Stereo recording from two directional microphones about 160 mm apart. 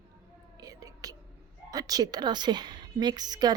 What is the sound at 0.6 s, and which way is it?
Whispering, 20° right (ahead or behind).